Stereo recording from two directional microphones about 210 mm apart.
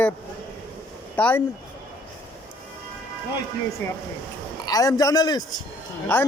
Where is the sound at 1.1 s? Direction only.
10° left (ahead or behind).